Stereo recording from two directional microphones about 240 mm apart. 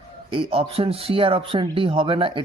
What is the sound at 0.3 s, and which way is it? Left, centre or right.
Speech, right.